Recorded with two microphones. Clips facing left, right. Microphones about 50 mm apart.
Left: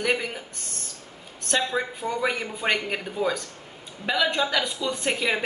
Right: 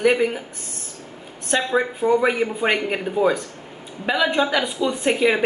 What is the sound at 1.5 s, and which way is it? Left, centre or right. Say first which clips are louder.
A woman's voice: right 5 dB; centre.